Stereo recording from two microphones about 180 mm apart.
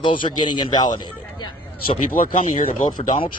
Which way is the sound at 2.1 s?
50° left (ahead or behind).